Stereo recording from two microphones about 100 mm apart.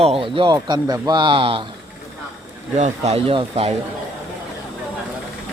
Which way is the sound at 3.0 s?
80° right.